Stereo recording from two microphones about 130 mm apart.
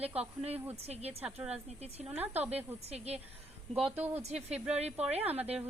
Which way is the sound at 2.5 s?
55° right (ahead or behind).